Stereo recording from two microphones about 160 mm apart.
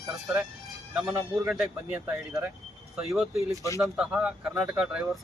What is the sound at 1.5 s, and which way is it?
Speech, 10° right (ahead or behind).